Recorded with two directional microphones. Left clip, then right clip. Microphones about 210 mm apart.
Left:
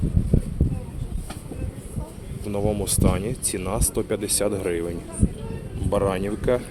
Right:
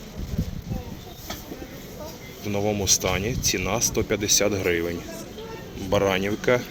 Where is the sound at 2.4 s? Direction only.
Centre (ahead or behind).